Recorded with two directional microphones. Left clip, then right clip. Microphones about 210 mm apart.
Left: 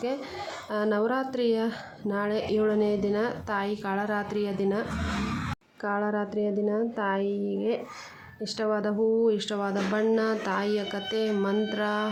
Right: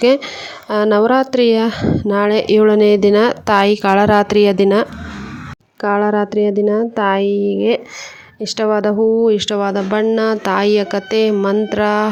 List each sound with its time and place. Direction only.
0.7 s a woman's voice: 45° right (ahead or behind)